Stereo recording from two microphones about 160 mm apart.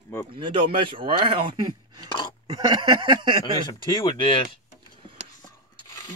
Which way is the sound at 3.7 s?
30° left (ahead or behind).